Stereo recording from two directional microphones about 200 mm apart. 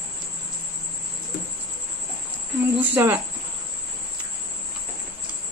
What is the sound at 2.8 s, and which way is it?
Speech, 10° right (ahead or behind).